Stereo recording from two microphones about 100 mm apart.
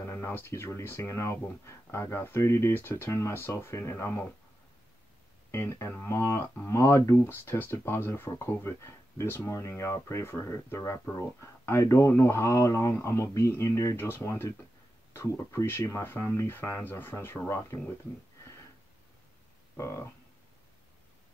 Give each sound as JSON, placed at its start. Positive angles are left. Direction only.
{"t": 0.0, "sound": "speech", "side_deg": 30}
{"t": 5.5, "sound": "speech", "side_deg": 30}
{"t": 19.8, "sound": "speech", "side_deg": 30}